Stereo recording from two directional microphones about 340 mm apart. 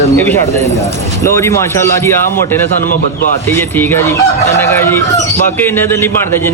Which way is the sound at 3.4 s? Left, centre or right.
Centre.